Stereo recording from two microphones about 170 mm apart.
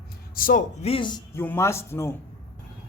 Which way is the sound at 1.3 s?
15° left (ahead or behind).